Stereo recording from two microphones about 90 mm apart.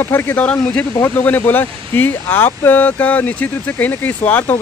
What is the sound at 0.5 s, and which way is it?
Speech, 15° left (ahead or behind).